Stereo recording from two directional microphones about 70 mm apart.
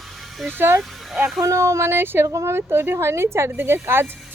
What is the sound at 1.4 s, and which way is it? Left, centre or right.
Speech, right.